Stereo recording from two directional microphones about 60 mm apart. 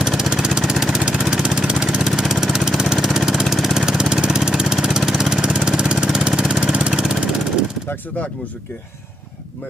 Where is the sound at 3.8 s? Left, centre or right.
Centre.